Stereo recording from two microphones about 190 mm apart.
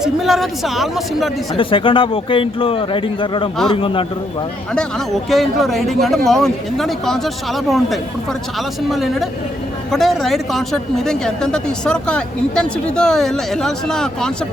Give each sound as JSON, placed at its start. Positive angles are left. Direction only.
{"t": 0.0, "sound": "speech", "side_deg": 0}
{"t": 1.5, "sound": "speech", "side_deg": 25}
{"t": 4.7, "sound": "speech", "side_deg": 5}